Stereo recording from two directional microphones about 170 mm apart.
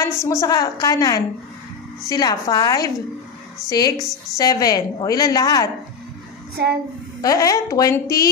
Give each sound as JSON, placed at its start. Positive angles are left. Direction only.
{"t": 0.0, "sound": "a woman's voice", "side_deg": 15}
{"t": 6.5, "sound": "a child's voice", "side_deg": -65}
{"t": 7.2, "sound": "a woman's voice", "side_deg": 20}